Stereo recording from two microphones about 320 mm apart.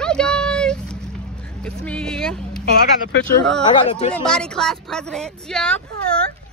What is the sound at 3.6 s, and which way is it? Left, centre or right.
Speech, centre.